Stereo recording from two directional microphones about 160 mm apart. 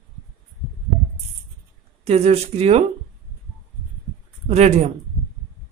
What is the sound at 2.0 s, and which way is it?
Speech, 40° right (ahead or behind).